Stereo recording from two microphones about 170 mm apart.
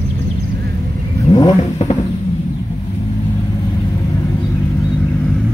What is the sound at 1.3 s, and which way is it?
Vehicle, 25° left (ahead or behind).